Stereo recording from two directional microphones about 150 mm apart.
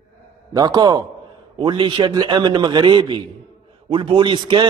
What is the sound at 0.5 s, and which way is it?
A man's voice, 30° right (ahead or behind).